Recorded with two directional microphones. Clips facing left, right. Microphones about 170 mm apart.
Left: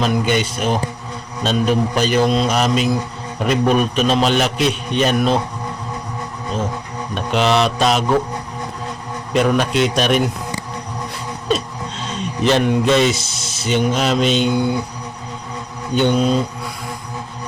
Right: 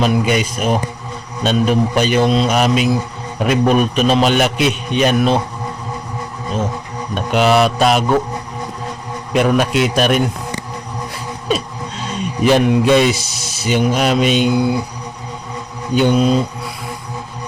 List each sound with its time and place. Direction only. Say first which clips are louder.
0.0 s a man's voice: right 2 dB; 10° right (ahead or behind)
4.5 s a man's voice: right 2 dB; 35° left (ahead or behind)
4.9 s a man's voice: right 3 dB; centre (ahead or behind)
7.1 s a man's voice: right 3 dB; 5° right (ahead or behind)
9.3 s a man's voice: right 2 dB; 5° right (ahead or behind)
11.4 s music: even; 10° right (ahead or behind)
13.2 s a sound: right 1 dB; 25° left (ahead or behind)
13.7 s speech: right 2 dB; 10° right (ahead or behind)
16.0 s speech: right 2 dB; 5° right (ahead or behind)